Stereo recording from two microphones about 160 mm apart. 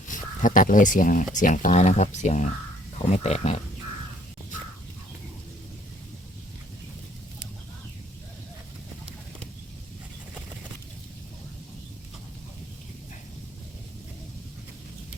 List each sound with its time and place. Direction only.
0.1 s speech: 55° left (ahead or behind)